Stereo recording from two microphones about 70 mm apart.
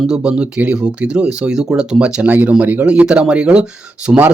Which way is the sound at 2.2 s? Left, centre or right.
Right.